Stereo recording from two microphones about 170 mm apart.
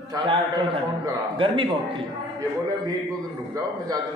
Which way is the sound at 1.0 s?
30° right (ahead or behind).